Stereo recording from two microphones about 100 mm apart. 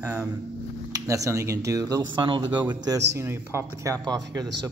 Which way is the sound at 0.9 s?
35° right (ahead or behind).